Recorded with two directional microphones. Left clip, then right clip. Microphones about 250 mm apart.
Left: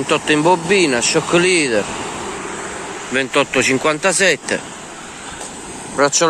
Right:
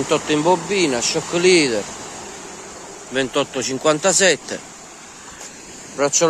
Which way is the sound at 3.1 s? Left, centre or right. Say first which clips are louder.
Left 5 dB; right.